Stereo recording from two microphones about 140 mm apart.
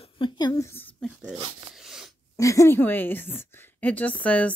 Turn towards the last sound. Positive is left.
turn(degrees=10)  # may be behind; listen again after turning